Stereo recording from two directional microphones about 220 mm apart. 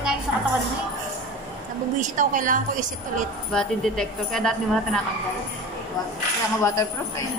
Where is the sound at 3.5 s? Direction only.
5° left (ahead or behind).